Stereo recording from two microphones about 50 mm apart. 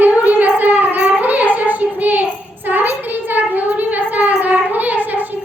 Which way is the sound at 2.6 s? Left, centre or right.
Right.